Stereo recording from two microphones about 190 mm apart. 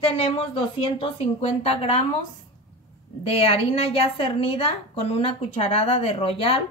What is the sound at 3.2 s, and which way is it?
A woman's voice, 30° left (ahead or behind).